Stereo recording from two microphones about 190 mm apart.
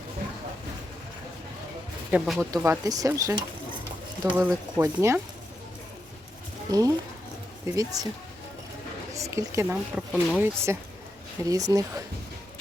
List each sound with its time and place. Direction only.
2.0 s speech: 5° right (ahead or behind)
2.5 s speech: 20° right (ahead or behind)
4.4 s speech: 10° right (ahead or behind)
6.7 s speech: 20° right (ahead or behind)
9.1 s speech: 15° right (ahead or behind)